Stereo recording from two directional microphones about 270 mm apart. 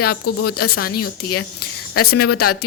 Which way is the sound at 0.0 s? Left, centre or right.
Left.